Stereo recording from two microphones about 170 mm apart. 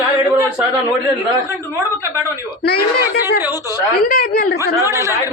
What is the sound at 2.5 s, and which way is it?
Speech, 70° left (ahead or behind).